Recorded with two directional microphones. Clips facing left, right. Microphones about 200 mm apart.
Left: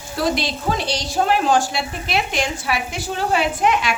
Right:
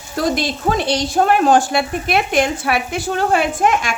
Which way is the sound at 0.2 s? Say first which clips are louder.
Right 3 dB; 45° right (ahead or behind).